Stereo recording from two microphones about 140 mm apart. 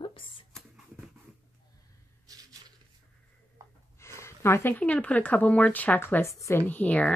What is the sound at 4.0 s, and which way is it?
Speech, 20° left (ahead or behind).